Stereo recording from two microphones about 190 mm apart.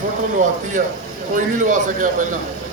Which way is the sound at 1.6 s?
45° right (ahead or behind).